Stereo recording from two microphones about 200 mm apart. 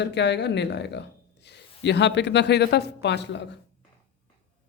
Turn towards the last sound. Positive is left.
turn(degrees=60)  # may be behind; listen again after turning